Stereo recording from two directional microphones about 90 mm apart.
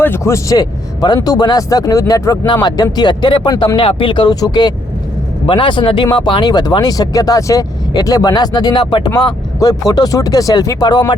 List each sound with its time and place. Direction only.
0.0 s speech: 30° left (ahead or behind); by 3.5 s 60° left (ahead or behind)
3.8 s speech: 70° left (ahead or behind)
4.4 s speech: 50° left (ahead or behind)
5.5 s speech: 65° left (ahead or behind)
9.1 s speech: 45° left (ahead or behind)